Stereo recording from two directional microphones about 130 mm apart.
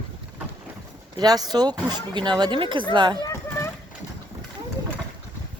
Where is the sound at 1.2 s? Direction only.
30° right (ahead or behind).